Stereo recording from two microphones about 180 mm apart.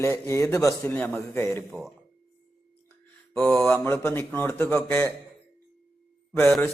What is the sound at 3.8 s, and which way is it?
Speech, 15° left (ahead or behind).